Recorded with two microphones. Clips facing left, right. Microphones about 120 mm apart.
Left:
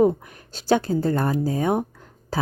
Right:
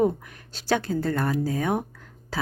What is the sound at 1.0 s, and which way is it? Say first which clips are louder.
Speech: left 3 dB; 35° left (ahead or behind).